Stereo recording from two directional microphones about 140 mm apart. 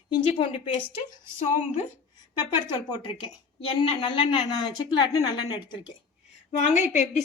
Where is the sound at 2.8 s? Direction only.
30° left (ahead or behind).